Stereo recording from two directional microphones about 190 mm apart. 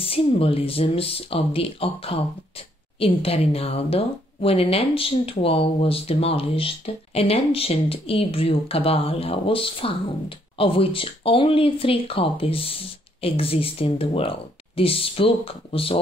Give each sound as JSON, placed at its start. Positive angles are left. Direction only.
{"t": 0.0, "sound": "speech", "side_deg": 30}